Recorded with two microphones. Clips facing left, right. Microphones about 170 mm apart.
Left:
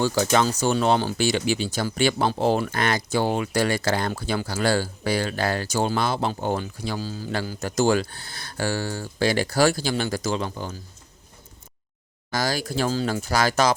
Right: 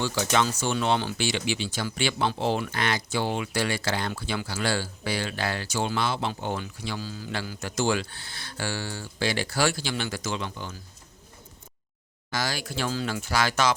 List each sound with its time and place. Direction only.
0.0 s speech: 40° left (ahead or behind)
12.3 s speech: 40° left (ahead or behind)